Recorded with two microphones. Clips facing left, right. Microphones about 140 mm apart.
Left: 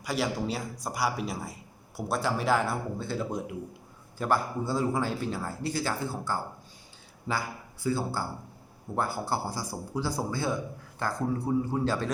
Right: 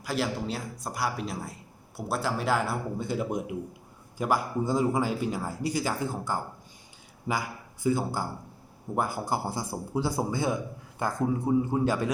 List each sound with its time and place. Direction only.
0.0 s a man's voice: centre (ahead or behind)
3.0 s a man's voice: 15° right (ahead or behind)